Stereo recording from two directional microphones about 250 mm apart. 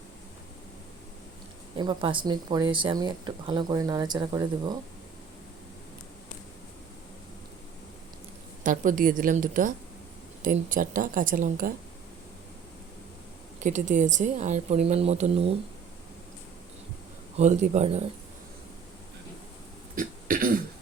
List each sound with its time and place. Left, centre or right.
1.8 s speech: centre
8.6 s speech: right
13.6 s speech: right
17.3 s speech: right
20.0 s a sound: right